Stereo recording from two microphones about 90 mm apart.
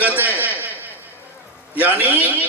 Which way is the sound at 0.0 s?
20° right (ahead or behind).